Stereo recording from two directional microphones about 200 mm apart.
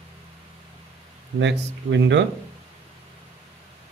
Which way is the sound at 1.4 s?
65° right (ahead or behind).